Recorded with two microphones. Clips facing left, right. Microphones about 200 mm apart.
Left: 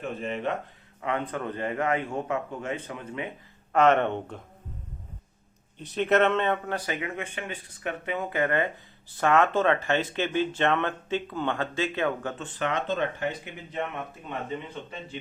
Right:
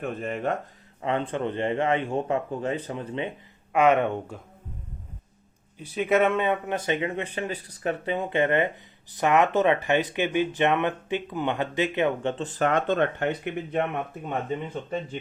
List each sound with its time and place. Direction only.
0.0 s speech: 50° right (ahead or behind)
1.0 s a man's voice: 30° right (ahead or behind)
3.7 s speech: 10° right (ahead or behind)
5.8 s speech: 10° right (ahead or behind)
6.7 s a man's voice: 25° right (ahead or behind)
12.5 s speech: 45° right (ahead or behind)